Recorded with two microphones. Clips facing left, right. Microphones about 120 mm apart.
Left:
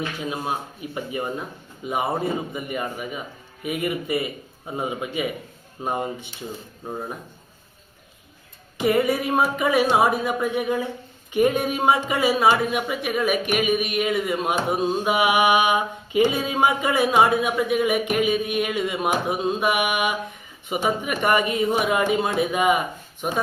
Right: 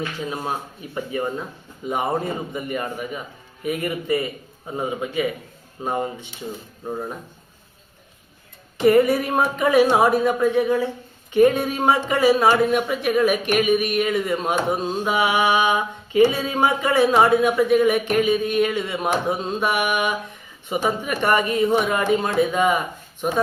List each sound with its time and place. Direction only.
0.9 s mantra: 15° left (ahead or behind)
1.9 s speech: 5° left (ahead or behind)
3.6 s mantra: 10° left (ahead or behind)
8.8 s mantra: 5° left (ahead or behind)
13.4 s speech: 5° left (ahead or behind)
13.8 s mantra: 5° left (ahead or behind)